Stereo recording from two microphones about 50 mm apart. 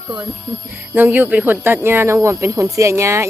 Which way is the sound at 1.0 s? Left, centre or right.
Right.